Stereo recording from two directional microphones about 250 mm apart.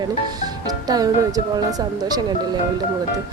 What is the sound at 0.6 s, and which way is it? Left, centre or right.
Speech, centre.